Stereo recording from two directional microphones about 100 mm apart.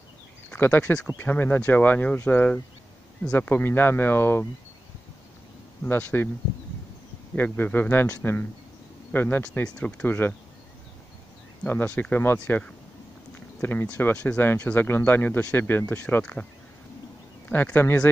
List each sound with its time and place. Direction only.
0.5 s speech: 20° left (ahead or behind)
5.9 s speech: 20° left (ahead or behind)
7.3 s speech: 20° left (ahead or behind)
11.6 s speech: 15° left (ahead or behind)
17.5 s speech: 20° left (ahead or behind)